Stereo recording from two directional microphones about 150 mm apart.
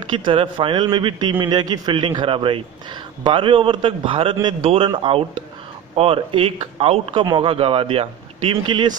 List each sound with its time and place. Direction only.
0.1 s a man's voice: 35° right (ahead or behind)